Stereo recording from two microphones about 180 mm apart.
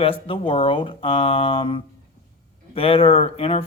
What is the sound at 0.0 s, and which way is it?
Speech, 30° left (ahead or behind).